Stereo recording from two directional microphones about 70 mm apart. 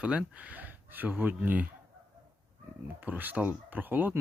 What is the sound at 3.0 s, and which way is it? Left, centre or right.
Speech, right.